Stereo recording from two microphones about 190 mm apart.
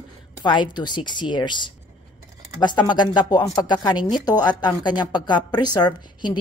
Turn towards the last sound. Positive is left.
turn(degrees=20)  # may be behind; listen again after turning